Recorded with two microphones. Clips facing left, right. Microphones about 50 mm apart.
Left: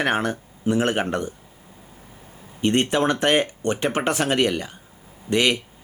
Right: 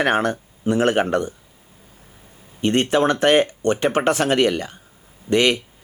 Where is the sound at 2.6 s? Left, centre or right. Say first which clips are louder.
Right 2 dB; centre.